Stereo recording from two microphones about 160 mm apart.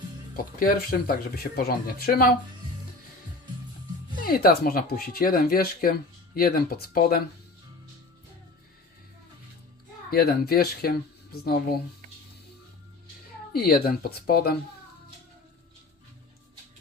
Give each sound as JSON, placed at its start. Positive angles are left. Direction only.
{"t": 0.3, "sound": "speech", "side_deg": 65}
{"t": 4.2, "sound": "speech", "side_deg": 65}
{"t": 10.1, "sound": "speech", "side_deg": 75}
{"t": 13.5, "sound": "speech", "side_deg": 70}